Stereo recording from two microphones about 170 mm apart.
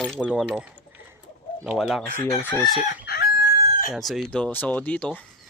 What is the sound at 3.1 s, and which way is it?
Chicken, 65° left (ahead or behind).